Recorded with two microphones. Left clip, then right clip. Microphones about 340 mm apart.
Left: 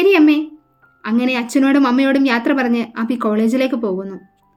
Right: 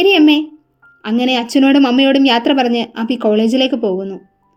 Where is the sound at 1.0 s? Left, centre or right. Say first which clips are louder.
Right 3 dB; centre.